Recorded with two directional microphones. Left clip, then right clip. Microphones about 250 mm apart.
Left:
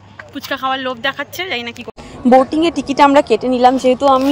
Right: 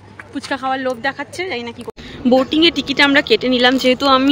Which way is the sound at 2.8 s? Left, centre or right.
Centre.